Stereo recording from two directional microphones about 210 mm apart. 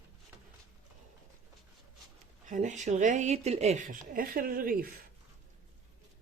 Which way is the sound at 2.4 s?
35° right (ahead or behind).